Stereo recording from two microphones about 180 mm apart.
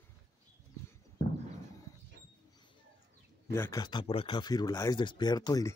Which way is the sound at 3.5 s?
15° left (ahead or behind).